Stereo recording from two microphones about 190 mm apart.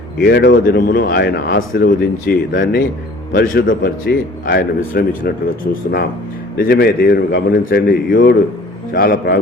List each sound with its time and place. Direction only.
0.2 s a man's voice: 55° left (ahead or behind)
6.6 s a man's voice: 55° left (ahead or behind)